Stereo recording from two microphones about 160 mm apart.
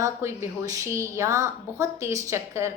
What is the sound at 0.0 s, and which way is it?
A woman's voice, 20° right (ahead or behind).